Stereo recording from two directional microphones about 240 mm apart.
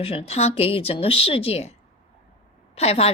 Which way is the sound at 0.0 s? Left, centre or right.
Left.